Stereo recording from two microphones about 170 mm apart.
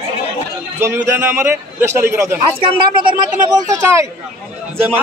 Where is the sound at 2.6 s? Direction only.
30° right (ahead or behind).